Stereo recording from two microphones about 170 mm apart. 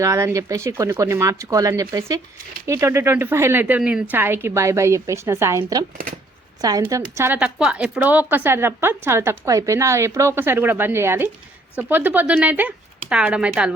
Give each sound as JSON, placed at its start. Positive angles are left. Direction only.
{"t": 0.0, "sound": "a woman's voice", "side_deg": -15}
{"t": 7.2, "sound": "speech", "side_deg": -10}